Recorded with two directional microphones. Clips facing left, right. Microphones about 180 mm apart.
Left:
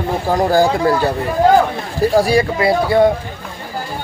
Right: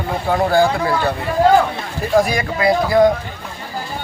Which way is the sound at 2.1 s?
30° left (ahead or behind).